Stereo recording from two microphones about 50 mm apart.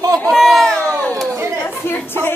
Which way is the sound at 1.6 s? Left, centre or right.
Left.